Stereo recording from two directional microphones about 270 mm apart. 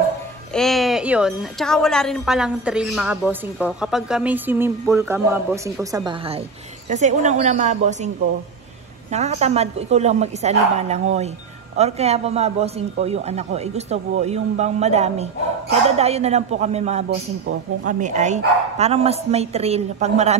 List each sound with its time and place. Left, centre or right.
0.5 s a woman's voice: centre; by 8.1 s right
9.1 s a man's voice: right